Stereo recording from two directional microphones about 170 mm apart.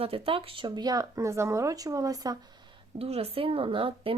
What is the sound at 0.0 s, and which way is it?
Speech, 35° right (ahead or behind).